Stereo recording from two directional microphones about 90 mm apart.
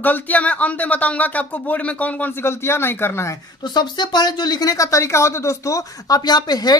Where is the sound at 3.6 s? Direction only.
55° left (ahead or behind).